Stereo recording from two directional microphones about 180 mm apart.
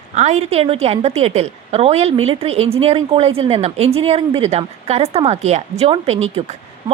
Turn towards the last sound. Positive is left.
turn(degrees=-35)  # may be behind; listen again after turning